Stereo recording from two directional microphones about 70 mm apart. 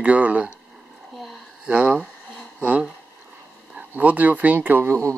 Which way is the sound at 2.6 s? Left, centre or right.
Centre.